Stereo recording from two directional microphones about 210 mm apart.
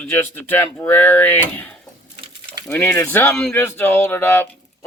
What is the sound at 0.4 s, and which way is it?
Speech, 10° left (ahead or behind).